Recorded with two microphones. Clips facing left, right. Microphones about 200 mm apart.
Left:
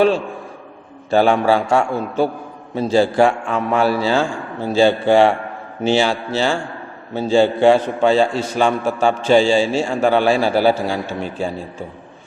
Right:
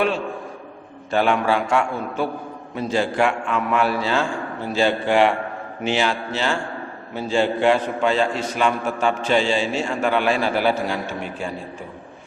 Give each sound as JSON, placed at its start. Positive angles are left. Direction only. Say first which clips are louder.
{"t": 1.1, "sound": "a man's voice", "louder": "left 5 dB", "side_deg": 35}